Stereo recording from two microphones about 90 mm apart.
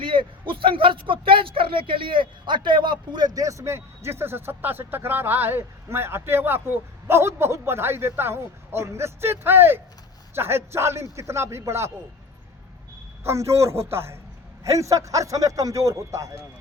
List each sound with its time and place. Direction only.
0.0 s a man's voice: 70° right (ahead or behind); by 11.9 s 30° right (ahead or behind)
13.2 s a man's voice: 30° right (ahead or behind)